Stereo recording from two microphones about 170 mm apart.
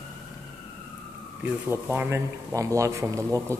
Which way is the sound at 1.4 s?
10° right (ahead or behind).